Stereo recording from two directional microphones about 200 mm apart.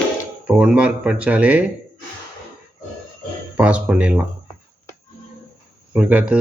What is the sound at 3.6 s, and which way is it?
Speech, 5° right (ahead or behind).